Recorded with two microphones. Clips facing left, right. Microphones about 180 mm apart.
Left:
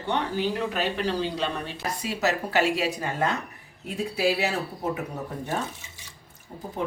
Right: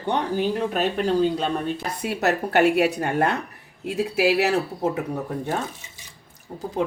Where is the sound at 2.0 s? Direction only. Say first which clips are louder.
Right 4 dB; 60° right (ahead or behind).